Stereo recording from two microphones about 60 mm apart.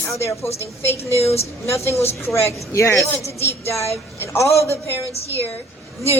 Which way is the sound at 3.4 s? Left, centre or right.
Left.